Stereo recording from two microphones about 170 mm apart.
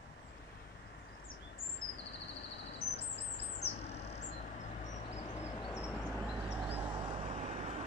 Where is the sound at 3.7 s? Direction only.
40° left (ahead or behind).